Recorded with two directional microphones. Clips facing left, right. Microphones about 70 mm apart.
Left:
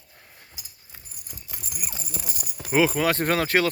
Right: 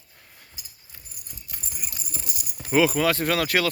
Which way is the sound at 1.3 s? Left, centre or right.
Left.